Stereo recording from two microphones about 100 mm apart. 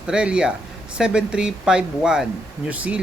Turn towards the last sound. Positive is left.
turn(degrees=-10)  # may be behind; listen again after turning